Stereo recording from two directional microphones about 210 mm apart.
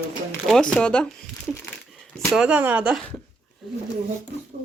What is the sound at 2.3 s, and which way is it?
Speech, 5° right (ahead or behind).